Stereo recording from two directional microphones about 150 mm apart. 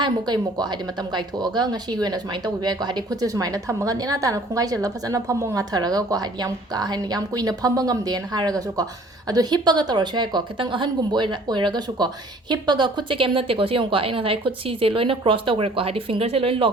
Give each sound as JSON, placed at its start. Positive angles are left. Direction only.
{"t": 0.0, "sound": "a woman's voice", "side_deg": -30}